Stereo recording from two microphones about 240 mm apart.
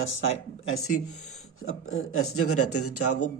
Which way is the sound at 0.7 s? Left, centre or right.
Left.